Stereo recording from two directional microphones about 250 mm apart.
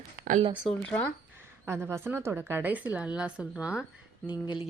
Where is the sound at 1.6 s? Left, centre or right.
Centre.